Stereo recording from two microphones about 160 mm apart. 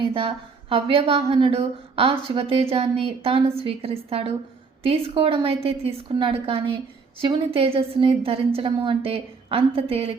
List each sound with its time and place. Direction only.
0.0 s a woman's voice: 35° right (ahead or behind)